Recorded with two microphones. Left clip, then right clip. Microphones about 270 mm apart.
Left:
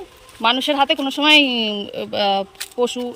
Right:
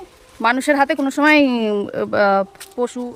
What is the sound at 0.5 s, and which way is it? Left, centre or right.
Speech, right.